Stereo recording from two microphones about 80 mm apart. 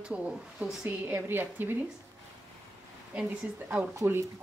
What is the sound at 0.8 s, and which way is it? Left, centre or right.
Speech, right.